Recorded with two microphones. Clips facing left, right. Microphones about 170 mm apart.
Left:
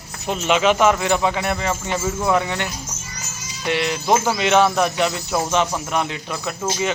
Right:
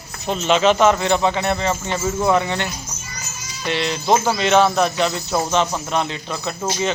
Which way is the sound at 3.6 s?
15° left (ahead or behind).